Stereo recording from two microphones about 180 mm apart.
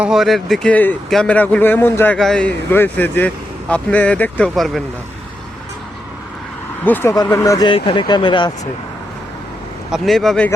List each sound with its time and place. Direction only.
0.0 s a man's voice: centre (ahead or behind)
6.8 s a man's voice: 10° left (ahead or behind)
9.9 s speech: centre (ahead or behind)